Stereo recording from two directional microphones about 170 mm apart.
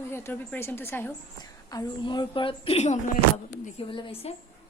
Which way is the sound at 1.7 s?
25° left (ahead or behind).